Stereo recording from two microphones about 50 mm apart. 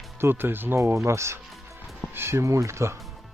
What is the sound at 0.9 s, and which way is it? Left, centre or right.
Speech, right.